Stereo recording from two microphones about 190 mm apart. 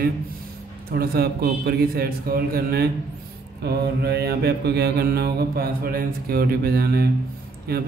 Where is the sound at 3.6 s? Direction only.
60° right (ahead or behind).